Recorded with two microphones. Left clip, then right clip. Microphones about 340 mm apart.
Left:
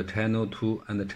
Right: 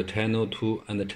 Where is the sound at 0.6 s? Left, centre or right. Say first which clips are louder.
Right 1 dB; right.